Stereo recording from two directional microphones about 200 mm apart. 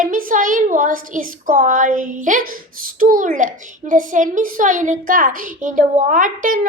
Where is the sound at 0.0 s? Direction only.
40° right (ahead or behind).